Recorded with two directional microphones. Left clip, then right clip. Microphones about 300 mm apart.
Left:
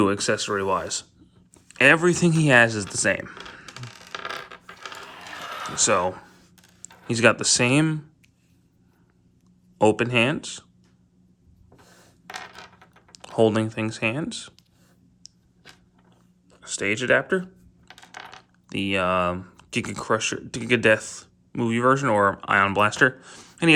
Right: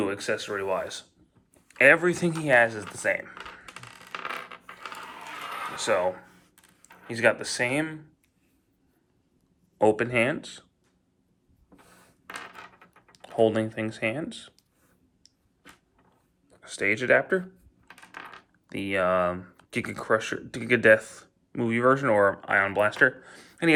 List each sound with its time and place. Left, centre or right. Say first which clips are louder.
0.0 s speech: left 6 dB; centre
0.5 s speech: left 5 dB; left
0.8 s speech: left 3 dB; centre
5.7 s speech: left 4 dB; centre
9.7 s speech: left 3 dB; centre
13.1 s speech: left 3 dB; centre
15.2 s a sound: left 12 dB; centre
16.5 s speech: even; centre
18.7 s speech: left 2 dB; centre